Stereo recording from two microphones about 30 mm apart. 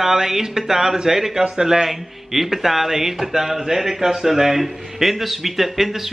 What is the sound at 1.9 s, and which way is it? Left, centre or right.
Speech, centre.